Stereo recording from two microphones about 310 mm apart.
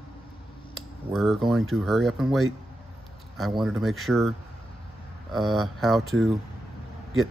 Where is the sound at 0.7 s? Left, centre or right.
Centre.